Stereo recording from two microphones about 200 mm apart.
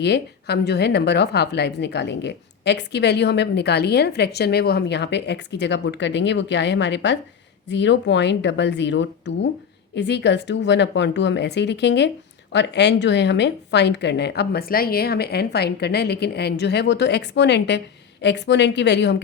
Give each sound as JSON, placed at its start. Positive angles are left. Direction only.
{"t": 0.0, "sound": "a woman's voice", "side_deg": 55}